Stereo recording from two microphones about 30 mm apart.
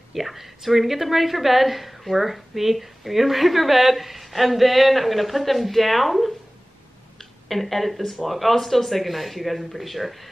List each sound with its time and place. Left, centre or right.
0.1 s a woman's voice: centre
7.2 s a sound: centre
8.2 s a woman's voice: centre